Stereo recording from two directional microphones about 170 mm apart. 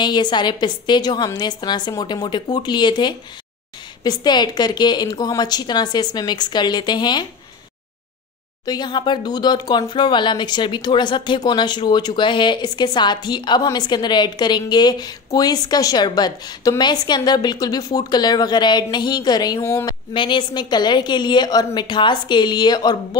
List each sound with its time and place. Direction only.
0.0 s speech: 25° left (ahead or behind)
8.6 s speech: 25° left (ahead or behind)
20.1 s speech: 30° left (ahead or behind)